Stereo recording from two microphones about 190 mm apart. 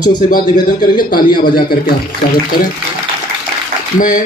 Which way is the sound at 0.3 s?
45° left (ahead or behind).